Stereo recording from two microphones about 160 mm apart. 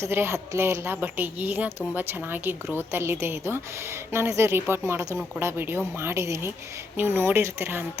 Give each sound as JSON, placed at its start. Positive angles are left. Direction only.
{"t": 0.0, "sound": "speech", "side_deg": -15}